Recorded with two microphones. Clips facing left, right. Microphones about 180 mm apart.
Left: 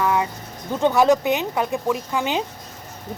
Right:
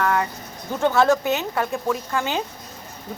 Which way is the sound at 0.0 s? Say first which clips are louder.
Left 1 dB; 10° left (ahead or behind).